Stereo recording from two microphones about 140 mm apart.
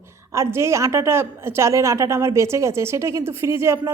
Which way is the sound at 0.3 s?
20° right (ahead or behind).